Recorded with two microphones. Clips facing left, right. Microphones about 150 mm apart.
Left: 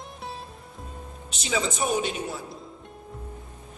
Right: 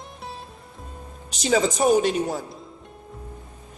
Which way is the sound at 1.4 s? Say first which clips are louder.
Right 7 dB; 45° right (ahead or behind).